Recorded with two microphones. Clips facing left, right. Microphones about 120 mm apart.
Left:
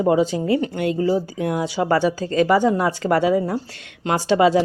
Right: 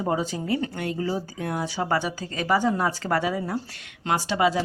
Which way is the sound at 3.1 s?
25° left (ahead or behind).